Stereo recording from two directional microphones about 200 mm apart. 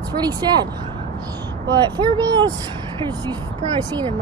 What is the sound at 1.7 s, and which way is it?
Speech, 20° right (ahead or behind).